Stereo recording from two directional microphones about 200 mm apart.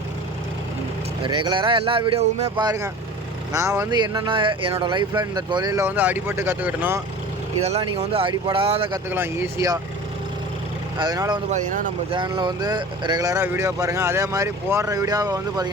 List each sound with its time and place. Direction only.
1.2 s speech: 25° right (ahead or behind)
2.6 s speech: 15° right (ahead or behind)
7.6 s speech: 30° right (ahead or behind)
9.0 s speech: 10° right (ahead or behind)
10.9 s speech: 20° right (ahead or behind)